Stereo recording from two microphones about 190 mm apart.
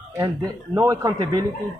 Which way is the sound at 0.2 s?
20° right (ahead or behind).